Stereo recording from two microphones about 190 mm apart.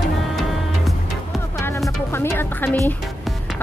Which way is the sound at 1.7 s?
15° left (ahead or behind).